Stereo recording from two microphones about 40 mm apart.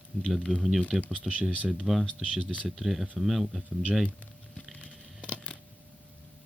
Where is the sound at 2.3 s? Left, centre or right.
Centre.